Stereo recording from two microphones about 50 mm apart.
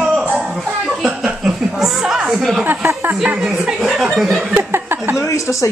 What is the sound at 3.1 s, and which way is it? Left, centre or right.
Speech, right.